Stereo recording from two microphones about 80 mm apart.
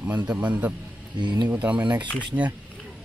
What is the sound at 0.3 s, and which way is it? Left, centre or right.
Speech, centre.